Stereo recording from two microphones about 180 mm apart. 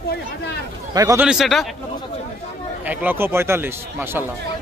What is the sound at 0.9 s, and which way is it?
Speech, 20° right (ahead or behind).